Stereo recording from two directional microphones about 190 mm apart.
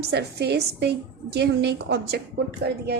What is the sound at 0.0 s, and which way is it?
A woman's voice, 60° right (ahead or behind).